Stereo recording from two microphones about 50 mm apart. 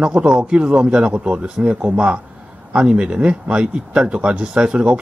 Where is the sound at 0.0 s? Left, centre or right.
Centre.